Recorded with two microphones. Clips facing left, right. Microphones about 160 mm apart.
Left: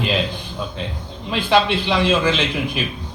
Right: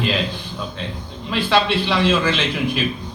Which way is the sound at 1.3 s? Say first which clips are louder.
Left 1 dB; 20° left (ahead or behind).